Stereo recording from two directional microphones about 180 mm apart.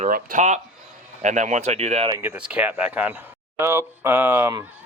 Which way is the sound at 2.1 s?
10° right (ahead or behind).